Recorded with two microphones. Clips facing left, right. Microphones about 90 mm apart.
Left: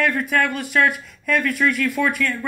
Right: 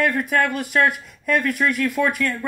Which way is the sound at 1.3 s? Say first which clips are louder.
Even; 30° right (ahead or behind).